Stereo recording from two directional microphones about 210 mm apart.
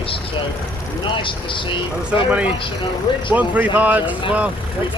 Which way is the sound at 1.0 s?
25° left (ahead or behind).